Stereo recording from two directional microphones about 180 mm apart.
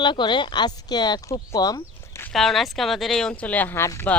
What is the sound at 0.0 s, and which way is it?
Speech, 25° left (ahead or behind).